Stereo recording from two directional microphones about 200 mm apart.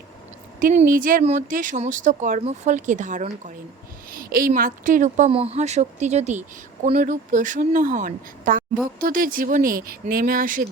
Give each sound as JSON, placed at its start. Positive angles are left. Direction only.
{"t": 0.6, "sound": "speech", "side_deg": -40}